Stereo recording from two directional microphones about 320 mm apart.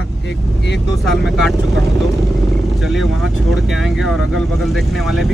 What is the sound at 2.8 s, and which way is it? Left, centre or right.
Speech, centre.